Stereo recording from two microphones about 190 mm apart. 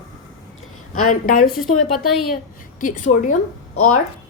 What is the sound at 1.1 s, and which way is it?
Speech, 45° left (ahead or behind).